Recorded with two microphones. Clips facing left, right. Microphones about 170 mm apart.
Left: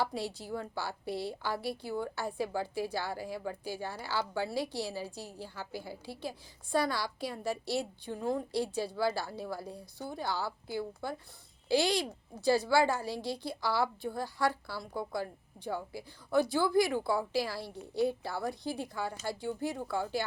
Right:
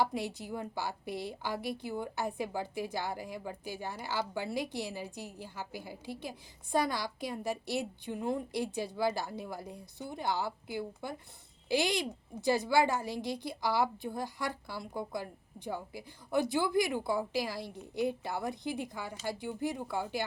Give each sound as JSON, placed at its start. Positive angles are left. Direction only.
{"t": 0.0, "sound": "a woman's voice", "side_deg": -20}